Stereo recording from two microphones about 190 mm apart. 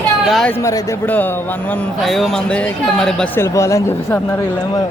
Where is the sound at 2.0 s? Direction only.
Centre (ahead or behind).